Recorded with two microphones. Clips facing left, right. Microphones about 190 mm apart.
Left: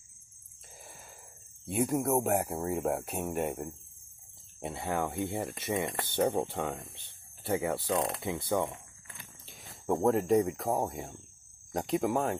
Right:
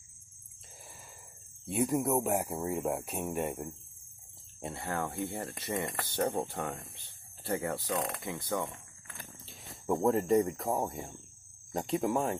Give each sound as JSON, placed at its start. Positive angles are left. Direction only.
{"t": 1.7, "sound": "speech", "side_deg": 0}
{"t": 4.6, "sound": "speech", "side_deg": 15}
{"t": 10.0, "sound": "speech", "side_deg": 0}